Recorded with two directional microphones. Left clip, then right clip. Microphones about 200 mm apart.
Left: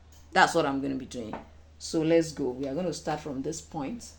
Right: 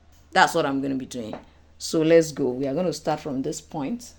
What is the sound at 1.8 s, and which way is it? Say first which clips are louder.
Speech: right 7 dB; 65° right (ahead or behind).